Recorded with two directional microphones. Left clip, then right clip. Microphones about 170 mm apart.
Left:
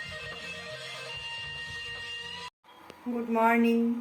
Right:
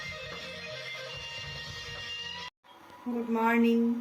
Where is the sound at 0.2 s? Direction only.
25° right (ahead or behind).